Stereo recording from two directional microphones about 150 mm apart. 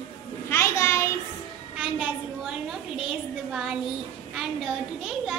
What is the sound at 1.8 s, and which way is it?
A woman's voice, 5° right (ahead or behind).